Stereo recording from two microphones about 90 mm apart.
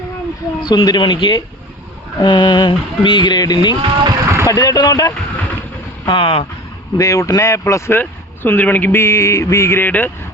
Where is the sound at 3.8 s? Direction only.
65° right (ahead or behind).